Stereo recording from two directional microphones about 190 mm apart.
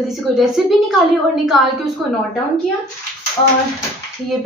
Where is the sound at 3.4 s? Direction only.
30° left (ahead or behind).